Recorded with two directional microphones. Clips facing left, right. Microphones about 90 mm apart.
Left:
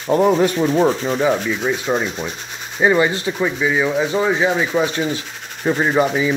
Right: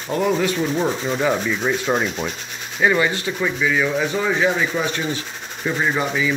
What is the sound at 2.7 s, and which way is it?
Rub, 25° left (ahead or behind).